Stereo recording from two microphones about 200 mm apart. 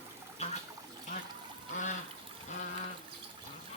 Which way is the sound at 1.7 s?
35° left (ahead or behind).